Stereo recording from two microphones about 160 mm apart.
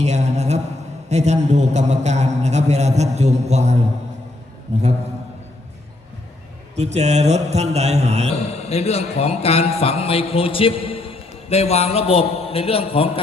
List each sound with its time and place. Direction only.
0.0 s a sound: 45° right (ahead or behind)
1.1 s a man's voice: 45° right (ahead or behind)
6.7 s a man's voice: 40° right (ahead or behind)
8.6 s a man's voice: 40° left (ahead or behind)